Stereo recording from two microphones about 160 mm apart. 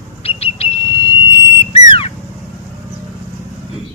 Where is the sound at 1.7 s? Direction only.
35° left (ahead or behind).